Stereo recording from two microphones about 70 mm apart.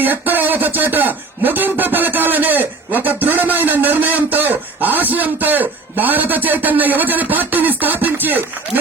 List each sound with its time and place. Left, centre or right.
0.0 s speech: right